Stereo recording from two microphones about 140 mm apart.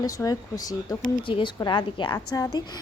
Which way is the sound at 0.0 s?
25° left (ahead or behind).